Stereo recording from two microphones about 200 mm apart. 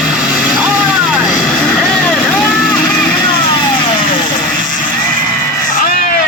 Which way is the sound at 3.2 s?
25° left (ahead or behind).